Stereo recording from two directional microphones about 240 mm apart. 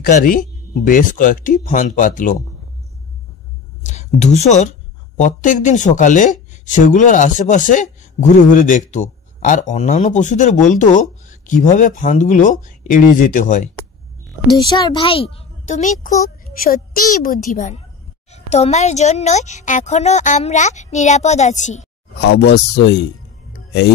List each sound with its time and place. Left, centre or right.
0.0 s speech: left
3.8 s speech: left
14.7 s a woman's voice: centre
22.2 s speech: left